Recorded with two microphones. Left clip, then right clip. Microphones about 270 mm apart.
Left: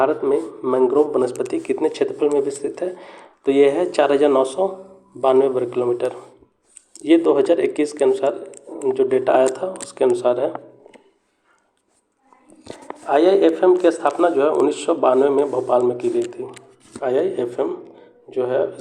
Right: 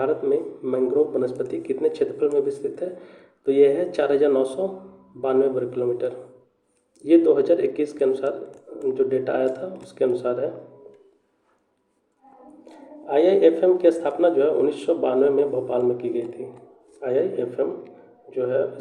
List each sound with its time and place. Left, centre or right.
0.0 s speech: centre
12.6 s speech: centre